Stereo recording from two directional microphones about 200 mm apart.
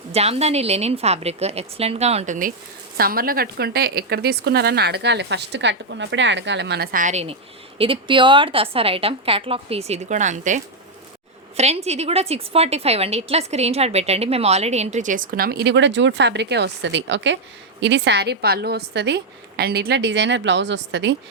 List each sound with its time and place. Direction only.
0.1 s a woman's voice: 30° right (ahead or behind); by 21.2 s 60° right (ahead or behind)